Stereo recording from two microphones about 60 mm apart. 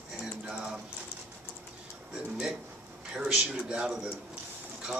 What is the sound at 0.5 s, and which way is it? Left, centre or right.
Speech, centre.